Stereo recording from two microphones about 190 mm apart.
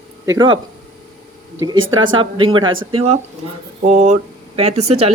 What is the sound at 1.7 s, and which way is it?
Speech, 90° right.